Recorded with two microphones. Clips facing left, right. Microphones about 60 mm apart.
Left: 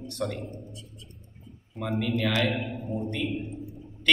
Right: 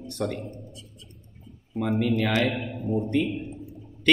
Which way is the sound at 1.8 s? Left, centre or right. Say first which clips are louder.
Right 3 dB; right.